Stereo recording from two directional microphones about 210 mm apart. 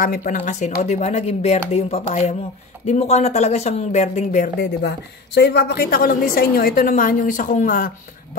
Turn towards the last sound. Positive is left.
turn(degrees=40)  # may be behind; listen again after turning